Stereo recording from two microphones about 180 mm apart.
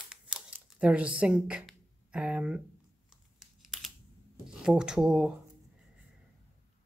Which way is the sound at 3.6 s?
Centre (ahead or behind).